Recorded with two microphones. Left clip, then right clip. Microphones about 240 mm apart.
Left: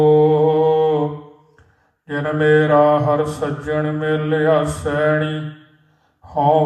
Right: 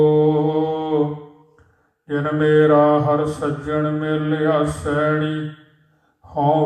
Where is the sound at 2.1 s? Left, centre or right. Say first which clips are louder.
Left 2 dB; left.